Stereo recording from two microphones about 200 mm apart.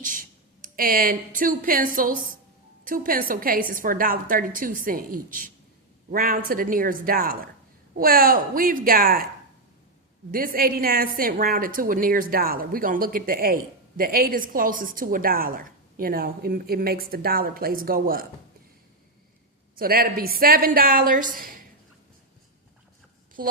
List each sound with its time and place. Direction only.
0.0 s a sound: 45° right (ahead or behind)
2.0 s speech: 45° right (ahead or behind)
10.3 s speech: 45° right (ahead or behind)
19.8 s speech: 45° right (ahead or behind)